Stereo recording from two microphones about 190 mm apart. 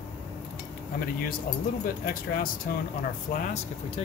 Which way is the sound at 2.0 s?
50° left (ahead or behind).